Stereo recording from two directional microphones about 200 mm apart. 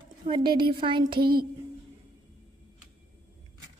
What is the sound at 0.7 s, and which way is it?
Speech, 25° right (ahead or behind).